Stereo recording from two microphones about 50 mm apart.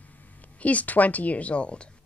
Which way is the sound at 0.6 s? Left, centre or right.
Left.